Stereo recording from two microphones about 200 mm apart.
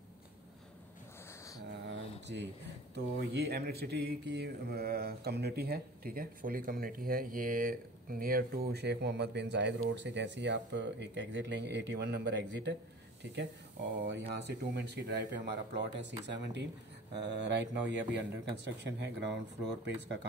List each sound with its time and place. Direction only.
1.9 s a sound: 60° right (ahead or behind)
2.9 s speech: 55° right (ahead or behind)
14.0 s speech: 60° right (ahead or behind)